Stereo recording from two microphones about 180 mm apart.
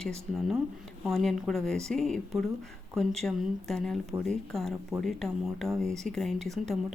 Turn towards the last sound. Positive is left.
turn(degrees=0)  # may be behind; listen again after turning